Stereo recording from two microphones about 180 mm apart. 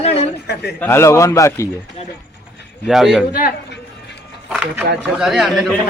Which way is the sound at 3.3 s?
55° left (ahead or behind).